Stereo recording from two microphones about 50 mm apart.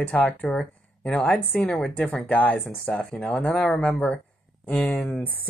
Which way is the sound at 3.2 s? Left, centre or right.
Centre.